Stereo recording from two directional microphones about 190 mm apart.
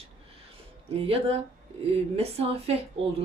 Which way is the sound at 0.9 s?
30° right (ahead or behind).